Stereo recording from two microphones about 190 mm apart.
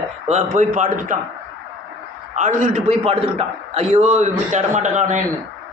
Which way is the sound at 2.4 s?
45° right (ahead or behind).